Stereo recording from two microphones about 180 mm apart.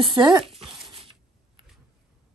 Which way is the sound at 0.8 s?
30° right (ahead or behind).